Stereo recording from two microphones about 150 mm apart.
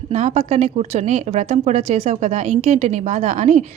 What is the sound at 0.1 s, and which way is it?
A woman's voice, 50° right (ahead or behind).